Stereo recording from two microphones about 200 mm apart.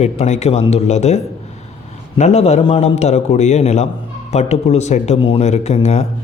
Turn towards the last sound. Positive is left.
turn(degrees=35)  # may be behind; listen again after turning